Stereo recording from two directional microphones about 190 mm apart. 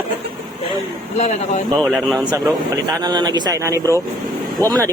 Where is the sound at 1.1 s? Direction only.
35° left (ahead or behind).